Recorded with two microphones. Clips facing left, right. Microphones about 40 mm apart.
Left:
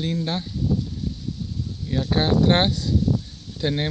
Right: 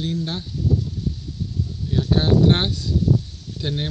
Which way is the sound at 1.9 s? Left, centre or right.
Left.